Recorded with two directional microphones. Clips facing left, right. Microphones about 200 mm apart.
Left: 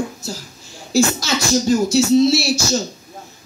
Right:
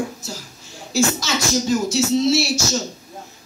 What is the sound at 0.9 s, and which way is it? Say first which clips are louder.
Speech: left 3 dB; 35° left (ahead or behind).